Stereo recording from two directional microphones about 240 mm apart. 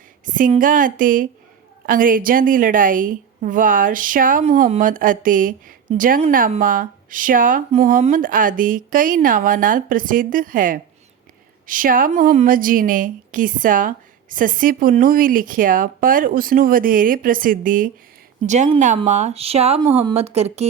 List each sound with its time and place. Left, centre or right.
0.3 s a woman's voice: right